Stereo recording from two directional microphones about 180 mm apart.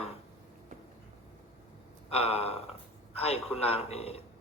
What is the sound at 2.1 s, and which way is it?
A man's voice, 35° left (ahead or behind).